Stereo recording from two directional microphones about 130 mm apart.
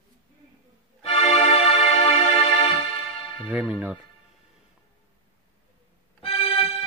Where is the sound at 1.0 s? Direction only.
50° left (ahead or behind).